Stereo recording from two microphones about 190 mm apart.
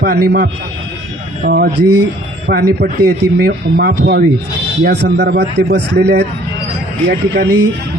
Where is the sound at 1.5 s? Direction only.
60° right (ahead or behind).